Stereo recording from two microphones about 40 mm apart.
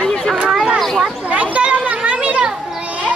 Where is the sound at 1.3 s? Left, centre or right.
Right.